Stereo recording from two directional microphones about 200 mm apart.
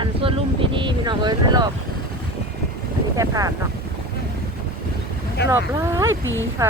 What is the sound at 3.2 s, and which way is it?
Speech, 15° right (ahead or behind).